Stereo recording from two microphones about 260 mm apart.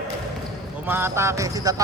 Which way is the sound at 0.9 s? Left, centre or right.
Centre.